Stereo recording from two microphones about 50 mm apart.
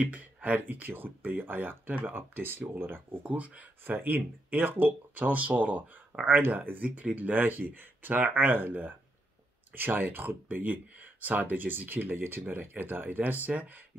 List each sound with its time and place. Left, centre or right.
0.0 s speech: right
2.0 s speech: right
3.3 s speech: right